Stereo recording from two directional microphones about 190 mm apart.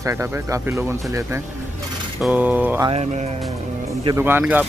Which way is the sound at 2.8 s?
35° right (ahead or behind).